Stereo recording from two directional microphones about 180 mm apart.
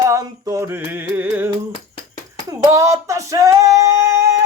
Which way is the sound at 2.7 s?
15° right (ahead or behind).